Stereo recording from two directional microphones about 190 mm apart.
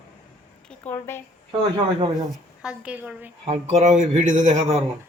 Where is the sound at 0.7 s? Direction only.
10° left (ahead or behind).